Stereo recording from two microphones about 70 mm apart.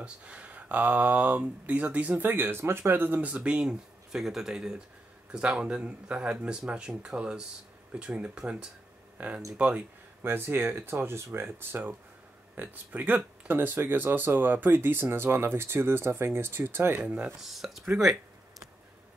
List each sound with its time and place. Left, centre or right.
0.0 s speech: centre
10.2 s speech: right
17.0 s speech: centre
17.4 s speech: centre